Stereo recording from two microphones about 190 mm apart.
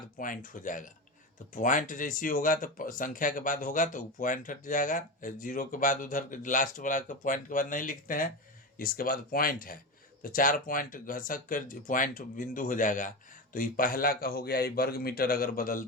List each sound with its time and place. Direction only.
0.2 s speech: 45° left (ahead or behind)